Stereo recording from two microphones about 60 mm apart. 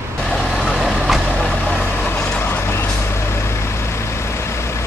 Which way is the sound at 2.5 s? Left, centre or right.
Left.